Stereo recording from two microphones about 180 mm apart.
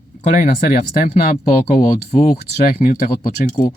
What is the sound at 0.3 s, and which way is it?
Speech, 45° left (ahead or behind).